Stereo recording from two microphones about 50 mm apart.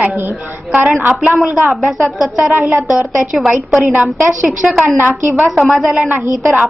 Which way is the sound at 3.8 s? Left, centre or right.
Right.